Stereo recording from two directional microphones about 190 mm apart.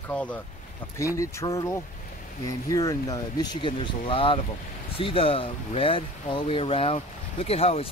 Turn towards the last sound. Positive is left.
turn(degrees=30)  # may be behind; listen again after turning